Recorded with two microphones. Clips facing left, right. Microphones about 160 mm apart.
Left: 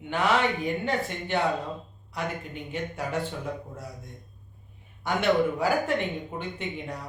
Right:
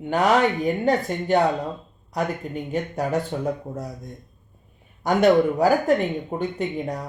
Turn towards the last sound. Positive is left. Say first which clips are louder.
# right 7 dB
turn(degrees=-40)  # may be behind; listen again after turning